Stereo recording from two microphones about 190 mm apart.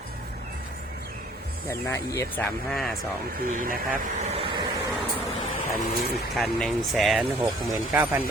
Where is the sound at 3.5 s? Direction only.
45° right (ahead or behind).